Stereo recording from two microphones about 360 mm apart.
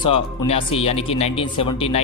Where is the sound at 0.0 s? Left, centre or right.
Centre.